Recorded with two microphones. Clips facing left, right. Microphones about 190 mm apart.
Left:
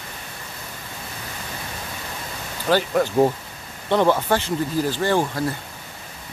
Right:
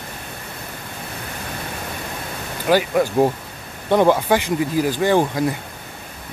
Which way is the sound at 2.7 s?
10° right (ahead or behind).